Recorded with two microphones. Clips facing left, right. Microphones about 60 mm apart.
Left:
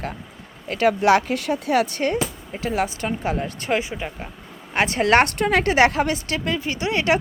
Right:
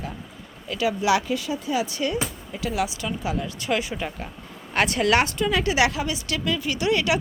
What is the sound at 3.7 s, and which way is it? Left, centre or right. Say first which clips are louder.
Speech: left 2 dB; left.